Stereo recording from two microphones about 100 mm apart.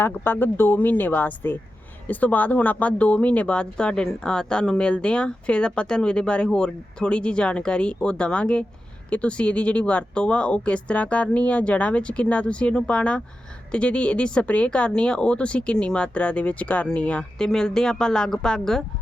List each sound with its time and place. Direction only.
0.0 s speech: 20° left (ahead or behind)